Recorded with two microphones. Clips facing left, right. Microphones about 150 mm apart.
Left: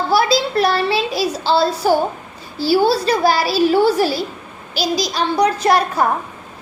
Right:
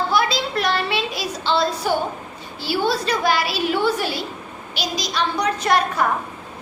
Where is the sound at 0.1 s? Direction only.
35° left (ahead or behind).